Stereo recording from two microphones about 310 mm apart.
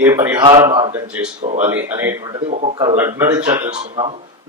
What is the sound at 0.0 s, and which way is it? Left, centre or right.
Speech, centre.